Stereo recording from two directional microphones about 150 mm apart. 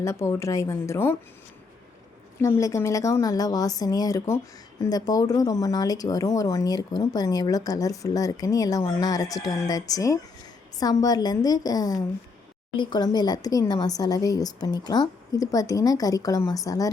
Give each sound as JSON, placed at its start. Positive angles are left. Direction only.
{"t": 0.0, "sound": "speech", "side_deg": 20}
{"t": 2.6, "sound": "speech", "side_deg": 20}